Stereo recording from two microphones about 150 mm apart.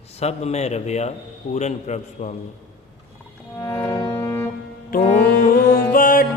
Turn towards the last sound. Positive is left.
turn(degrees=70)  # may be behind; listen again after turning